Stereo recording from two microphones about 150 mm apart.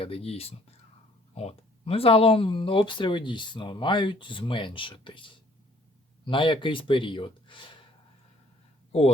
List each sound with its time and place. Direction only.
0.0 s speech: 40° left (ahead or behind)